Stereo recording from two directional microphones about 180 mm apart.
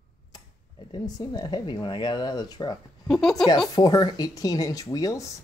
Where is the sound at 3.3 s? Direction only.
20° left (ahead or behind).